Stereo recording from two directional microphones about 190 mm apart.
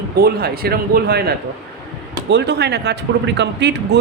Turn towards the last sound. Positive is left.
turn(degrees=-65)  # may be behind; listen again after turning